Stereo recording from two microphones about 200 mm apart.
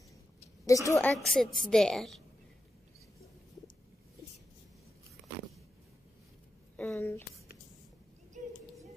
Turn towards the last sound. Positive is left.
turn(degrees=10)  # may be behind; listen again after turning